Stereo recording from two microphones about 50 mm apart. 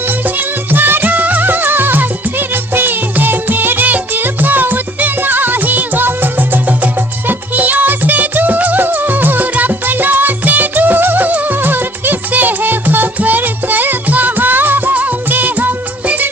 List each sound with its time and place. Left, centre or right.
0.7 s music: right